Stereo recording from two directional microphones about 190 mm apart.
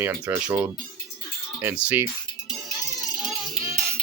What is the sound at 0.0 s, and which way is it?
Speech, 10° right (ahead or behind).